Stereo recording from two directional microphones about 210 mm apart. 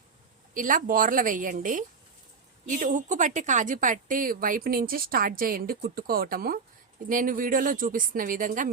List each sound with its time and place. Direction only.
0.5 s a woman's voice: 40° right (ahead or behind)